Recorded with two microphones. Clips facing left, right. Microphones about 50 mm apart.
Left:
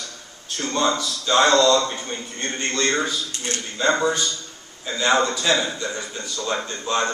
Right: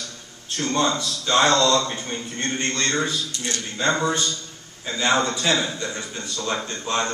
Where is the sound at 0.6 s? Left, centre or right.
Centre.